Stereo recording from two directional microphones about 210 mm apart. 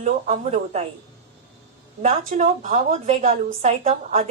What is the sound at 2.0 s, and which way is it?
A woman's voice, 30° right (ahead or behind).